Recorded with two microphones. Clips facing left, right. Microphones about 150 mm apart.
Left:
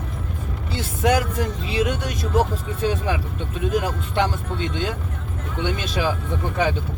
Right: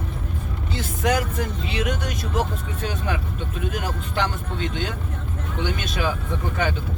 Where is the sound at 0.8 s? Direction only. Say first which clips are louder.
Left 3 dB; 30° left (ahead or behind).